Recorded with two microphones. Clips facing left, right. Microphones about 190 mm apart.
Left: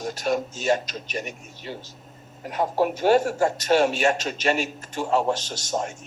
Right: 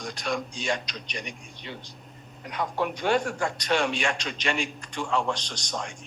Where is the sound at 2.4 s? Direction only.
40° left (ahead or behind).